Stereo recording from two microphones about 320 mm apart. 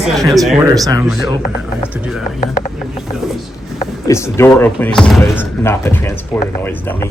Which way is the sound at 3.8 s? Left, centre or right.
Centre.